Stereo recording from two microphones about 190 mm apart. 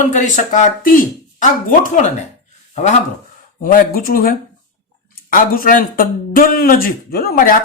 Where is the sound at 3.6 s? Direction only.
45° left (ahead or behind).